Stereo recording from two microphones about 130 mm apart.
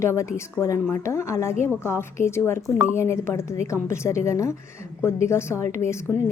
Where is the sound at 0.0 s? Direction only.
20° left (ahead or behind).